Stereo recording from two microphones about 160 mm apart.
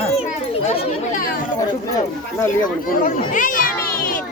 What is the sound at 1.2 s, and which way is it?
Chatter, 65° left (ahead or behind).